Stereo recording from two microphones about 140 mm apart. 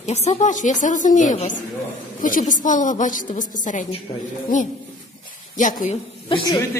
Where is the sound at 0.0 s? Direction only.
50° left (ahead or behind).